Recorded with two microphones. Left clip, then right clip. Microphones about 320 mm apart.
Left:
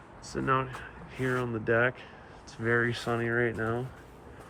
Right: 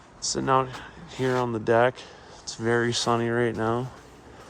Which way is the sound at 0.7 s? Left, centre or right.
Right.